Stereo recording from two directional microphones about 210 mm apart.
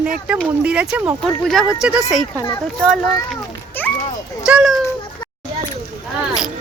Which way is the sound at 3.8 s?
10° left (ahead or behind).